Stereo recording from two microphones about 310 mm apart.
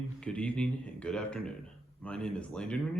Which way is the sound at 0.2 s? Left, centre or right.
Centre.